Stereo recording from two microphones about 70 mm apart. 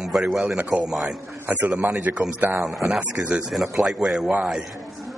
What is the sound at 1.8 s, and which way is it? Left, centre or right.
Speech, right.